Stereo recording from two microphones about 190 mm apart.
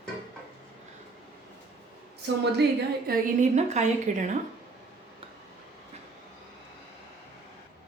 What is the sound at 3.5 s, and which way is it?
Speech, 40° right (ahead or behind).